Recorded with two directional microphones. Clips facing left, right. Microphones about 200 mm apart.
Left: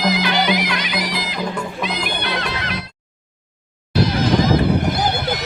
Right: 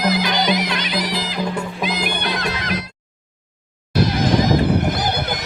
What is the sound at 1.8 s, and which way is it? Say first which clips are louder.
Music: right 1 dB; 40° right (ahead or behind).